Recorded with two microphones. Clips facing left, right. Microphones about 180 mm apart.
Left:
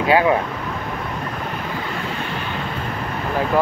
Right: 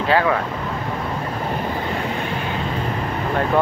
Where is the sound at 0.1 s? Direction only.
20° left (ahead or behind).